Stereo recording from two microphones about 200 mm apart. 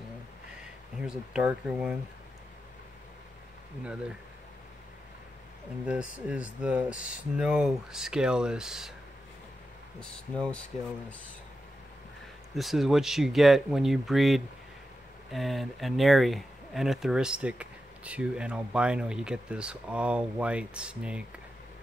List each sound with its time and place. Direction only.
0.6 s speech: 5° right (ahead or behind)
5.9 s speech: 5° right (ahead or behind)
9.9 s speech: 5° left (ahead or behind)
12.5 s speech: centre (ahead or behind)